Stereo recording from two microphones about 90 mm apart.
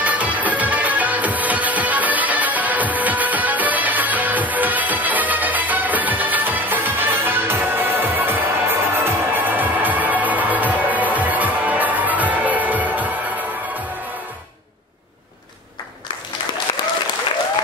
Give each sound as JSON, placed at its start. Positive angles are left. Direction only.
{"t": 0.0, "sound": "music", "side_deg": -15}